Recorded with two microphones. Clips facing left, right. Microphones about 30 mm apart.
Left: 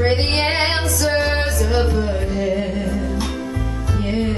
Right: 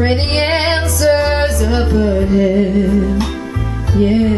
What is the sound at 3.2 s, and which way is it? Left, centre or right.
Music, right.